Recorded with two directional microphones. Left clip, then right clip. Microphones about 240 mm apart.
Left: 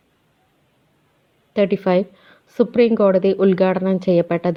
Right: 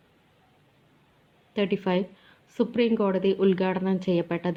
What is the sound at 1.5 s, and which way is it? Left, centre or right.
A woman's voice, left.